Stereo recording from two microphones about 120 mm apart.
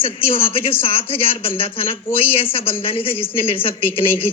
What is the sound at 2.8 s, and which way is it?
Speech, 50° left (ahead or behind).